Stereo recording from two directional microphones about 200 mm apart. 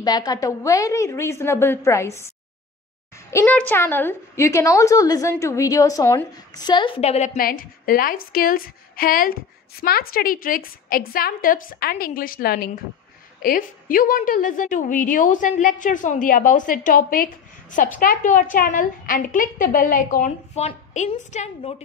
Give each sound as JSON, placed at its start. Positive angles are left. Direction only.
{"t": 0.0, "sound": "a woman's voice", "side_deg": 20}
{"t": 3.3, "sound": "a woman's voice", "side_deg": 10}